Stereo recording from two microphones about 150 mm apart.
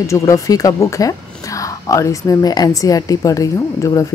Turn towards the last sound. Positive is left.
turn(degrees=20)  # may be behind; listen again after turning